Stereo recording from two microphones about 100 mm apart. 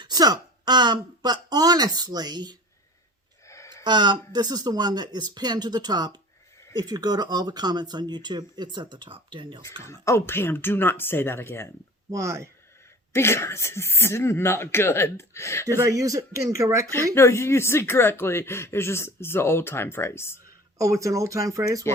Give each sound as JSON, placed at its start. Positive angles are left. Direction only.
{"t": 0.0, "sound": "speech", "side_deg": -40}
{"t": 3.4, "sound": "a sound", "side_deg": 30}
{"t": 3.8, "sound": "speech", "side_deg": -50}
{"t": 9.8, "sound": "speech", "side_deg": 30}
{"t": 12.1, "sound": "speech", "side_deg": -30}
{"t": 13.1, "sound": "speech", "side_deg": 25}
{"t": 15.8, "sound": "speech", "side_deg": -35}
{"t": 17.2, "sound": "speech", "side_deg": 25}
{"t": 20.7, "sound": "speech", "side_deg": -30}